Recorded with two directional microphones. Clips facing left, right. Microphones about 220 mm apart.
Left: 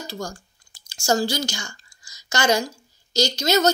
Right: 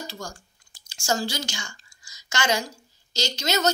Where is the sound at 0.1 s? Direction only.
40° left (ahead or behind).